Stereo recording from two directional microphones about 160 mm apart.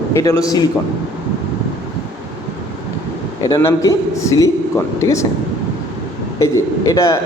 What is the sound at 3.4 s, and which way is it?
A man's voice, 20° left (ahead or behind).